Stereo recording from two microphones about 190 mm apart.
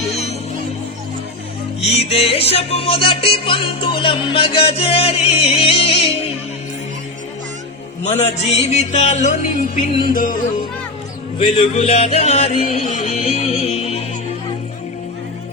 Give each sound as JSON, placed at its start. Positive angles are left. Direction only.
{"t": 0.1, "sound": "music", "side_deg": 35}
{"t": 1.8, "sound": "music", "side_deg": 35}
{"t": 8.0, "sound": "music", "side_deg": 35}
{"t": 11.3, "sound": "music", "side_deg": 30}